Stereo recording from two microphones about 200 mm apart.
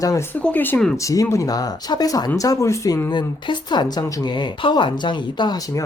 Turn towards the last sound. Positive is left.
turn(degrees=20)  # may be behind; listen again after turning